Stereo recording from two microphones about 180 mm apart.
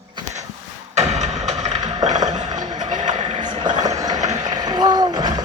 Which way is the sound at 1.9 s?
40° right (ahead or behind).